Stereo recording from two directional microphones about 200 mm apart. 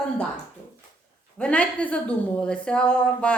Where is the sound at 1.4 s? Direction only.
5° left (ahead or behind).